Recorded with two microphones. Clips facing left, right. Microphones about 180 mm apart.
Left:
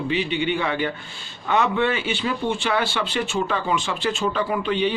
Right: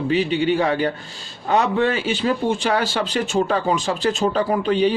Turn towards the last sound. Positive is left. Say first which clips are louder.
# right 4 dB
turn(degrees=-40)  # may be behind; listen again after turning